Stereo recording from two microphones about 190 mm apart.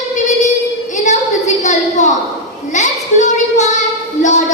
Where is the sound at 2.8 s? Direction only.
40° left (ahead or behind).